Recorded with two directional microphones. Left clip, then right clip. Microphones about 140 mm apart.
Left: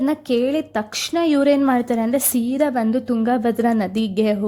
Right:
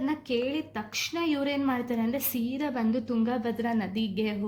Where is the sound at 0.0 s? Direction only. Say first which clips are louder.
Left 10 dB; 90° left.